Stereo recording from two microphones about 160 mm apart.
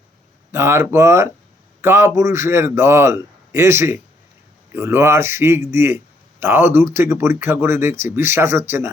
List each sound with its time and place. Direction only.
0.5 s speech: 15° right (ahead or behind)